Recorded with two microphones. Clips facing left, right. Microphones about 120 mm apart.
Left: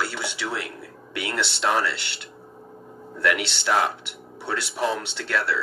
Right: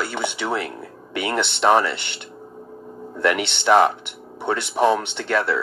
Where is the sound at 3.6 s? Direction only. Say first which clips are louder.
Right 10 dB; 55° right (ahead or behind).